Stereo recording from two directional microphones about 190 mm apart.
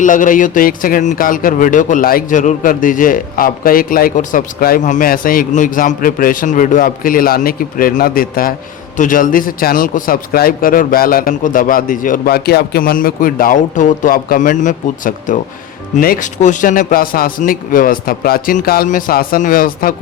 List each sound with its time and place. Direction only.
0.0 s a man's voice: 45° left (ahead or behind)